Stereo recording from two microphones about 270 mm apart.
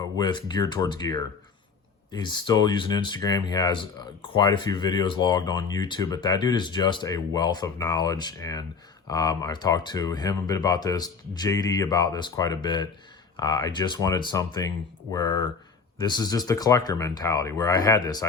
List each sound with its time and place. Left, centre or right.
0.2 s speech: centre